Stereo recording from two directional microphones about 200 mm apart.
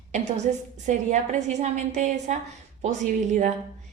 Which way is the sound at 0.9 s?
35° right (ahead or behind).